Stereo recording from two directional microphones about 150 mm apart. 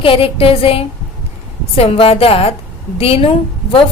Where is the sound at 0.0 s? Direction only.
40° left (ahead or behind).